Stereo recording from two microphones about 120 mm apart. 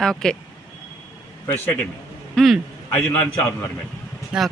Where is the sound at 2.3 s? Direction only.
Centre (ahead or behind).